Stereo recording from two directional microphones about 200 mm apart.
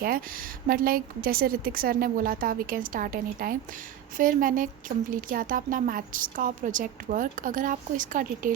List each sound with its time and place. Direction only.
0.0 s a woman's voice: 45° right (ahead or behind)